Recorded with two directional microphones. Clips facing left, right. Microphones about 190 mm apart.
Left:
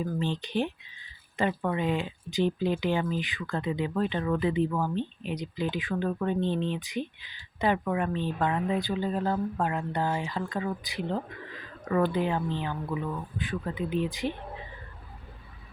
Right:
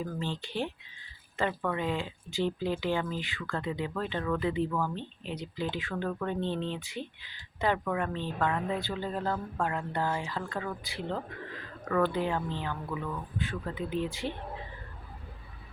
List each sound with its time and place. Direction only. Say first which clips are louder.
0.2 s speech: left 5 dB; 15° left (ahead or behind)